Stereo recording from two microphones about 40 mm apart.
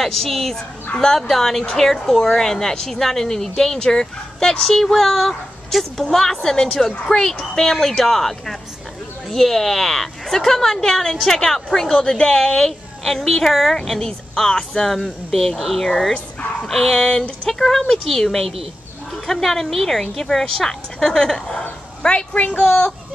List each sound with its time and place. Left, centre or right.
0.0 s a woman's voice: centre
15.9 s a woman's voice: centre
22.3 s a woman's voice: left